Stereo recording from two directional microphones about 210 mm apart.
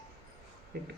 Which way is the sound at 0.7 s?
50° right (ahead or behind).